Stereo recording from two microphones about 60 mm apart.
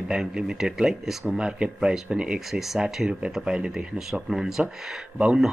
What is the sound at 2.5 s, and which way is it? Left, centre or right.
Speech, centre.